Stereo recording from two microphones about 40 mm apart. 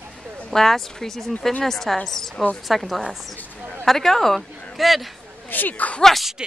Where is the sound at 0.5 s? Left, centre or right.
Centre.